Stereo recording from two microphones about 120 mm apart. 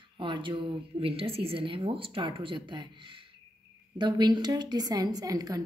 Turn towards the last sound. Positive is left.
turn(degrees=-30)  # may be behind; listen again after turning